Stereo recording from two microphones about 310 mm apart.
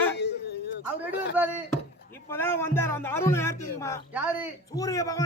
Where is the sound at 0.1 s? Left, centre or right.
Left.